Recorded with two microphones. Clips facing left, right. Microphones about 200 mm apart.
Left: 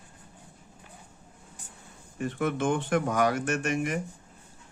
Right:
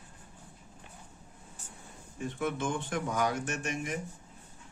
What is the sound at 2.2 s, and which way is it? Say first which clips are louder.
Speech: left 5 dB; 70° left (ahead or behind).